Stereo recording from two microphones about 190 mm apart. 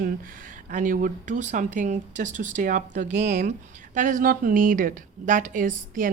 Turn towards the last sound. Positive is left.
turn(degrees=-45)  # may be behind; listen again after turning